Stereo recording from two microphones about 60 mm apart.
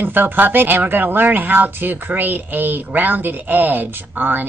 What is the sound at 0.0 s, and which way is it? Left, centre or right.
Speech, right.